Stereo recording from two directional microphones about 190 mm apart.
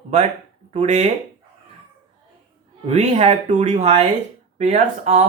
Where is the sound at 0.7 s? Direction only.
35° right (ahead or behind).